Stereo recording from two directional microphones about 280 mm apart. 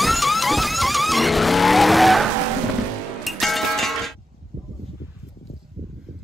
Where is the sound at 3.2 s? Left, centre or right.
Centre.